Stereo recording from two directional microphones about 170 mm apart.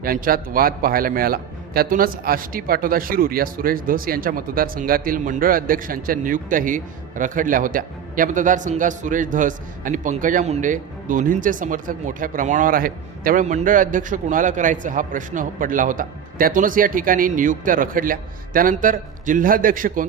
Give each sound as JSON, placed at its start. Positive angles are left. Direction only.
{"t": 0.0, "sound": "a man's voice", "side_deg": -60}